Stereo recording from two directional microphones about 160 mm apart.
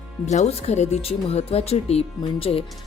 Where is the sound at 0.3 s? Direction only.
45° left (ahead or behind).